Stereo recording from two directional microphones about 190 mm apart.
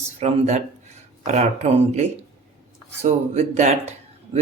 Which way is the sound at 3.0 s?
35° right (ahead or behind).